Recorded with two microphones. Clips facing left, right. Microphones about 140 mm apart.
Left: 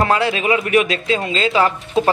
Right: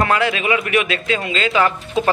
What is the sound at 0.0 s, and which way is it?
Speech, 30° left (ahead or behind).